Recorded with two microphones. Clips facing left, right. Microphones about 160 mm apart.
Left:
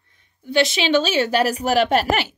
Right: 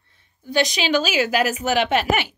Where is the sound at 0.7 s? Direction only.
25° left (ahead or behind).